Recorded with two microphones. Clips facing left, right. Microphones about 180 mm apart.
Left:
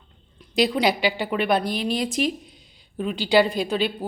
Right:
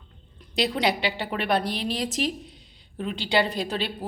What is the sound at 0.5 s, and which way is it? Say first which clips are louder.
A woman's voice: left 4 dB; 30° right (ahead or behind).